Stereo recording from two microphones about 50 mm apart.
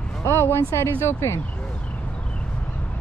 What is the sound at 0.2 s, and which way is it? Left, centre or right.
Speech, left.